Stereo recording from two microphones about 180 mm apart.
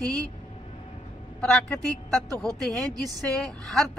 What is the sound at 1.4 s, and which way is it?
Speech, 5° left (ahead or behind).